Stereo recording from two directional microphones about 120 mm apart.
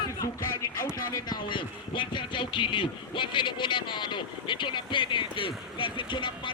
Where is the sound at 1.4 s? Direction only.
40° left (ahead or behind).